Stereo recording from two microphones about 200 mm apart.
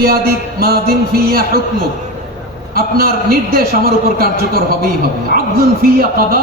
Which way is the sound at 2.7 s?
50° right (ahead or behind).